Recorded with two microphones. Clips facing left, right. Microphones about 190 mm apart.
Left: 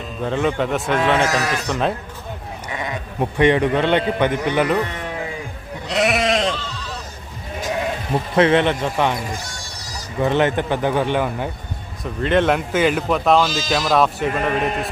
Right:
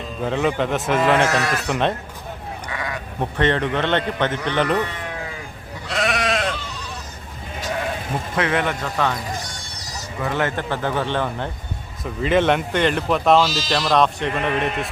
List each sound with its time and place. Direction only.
0.0 s speech: centre (ahead or behind)
2.6 s sheep: 20° left (ahead or behind)
3.2 s a man's voice: 10° left (ahead or behind)
5.9 s sheep: 20° left (ahead or behind)
8.4 s a man's voice: 25° left (ahead or behind)
10.2 s a man's voice: 25° left (ahead or behind)
12.2 s speech: centre (ahead or behind)